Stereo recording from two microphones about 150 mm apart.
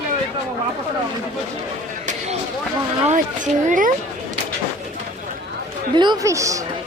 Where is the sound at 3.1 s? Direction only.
55° right (ahead or behind).